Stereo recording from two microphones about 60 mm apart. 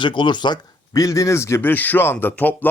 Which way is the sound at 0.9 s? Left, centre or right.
Left.